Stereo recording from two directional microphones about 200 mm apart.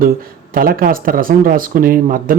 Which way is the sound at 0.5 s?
45° right (ahead or behind).